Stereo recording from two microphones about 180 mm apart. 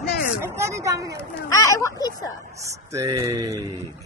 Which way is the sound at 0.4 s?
15° right (ahead or behind).